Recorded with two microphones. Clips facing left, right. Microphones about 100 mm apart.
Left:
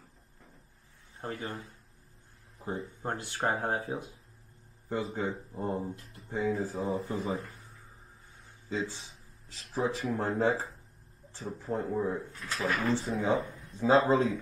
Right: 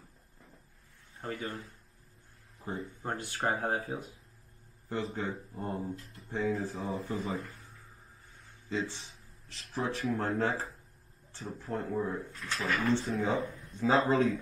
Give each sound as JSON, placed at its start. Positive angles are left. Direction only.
{"t": 1.2, "sound": "a man's voice", "side_deg": 25}
{"t": 2.6, "sound": "a sound", "side_deg": 5}
{"t": 3.0, "sound": "speech", "side_deg": 20}
{"t": 5.0, "sound": "speech", "side_deg": 5}
{"t": 5.9, "sound": "speech", "side_deg": 0}
{"t": 8.6, "sound": "speech", "side_deg": 5}
{"t": 13.9, "sound": "speech", "side_deg": 15}